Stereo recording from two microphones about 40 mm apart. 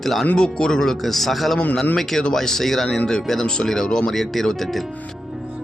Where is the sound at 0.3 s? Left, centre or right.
Centre.